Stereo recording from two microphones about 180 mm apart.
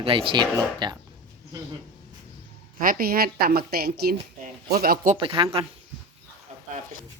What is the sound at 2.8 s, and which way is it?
A woman's voice, 55° right (ahead or behind).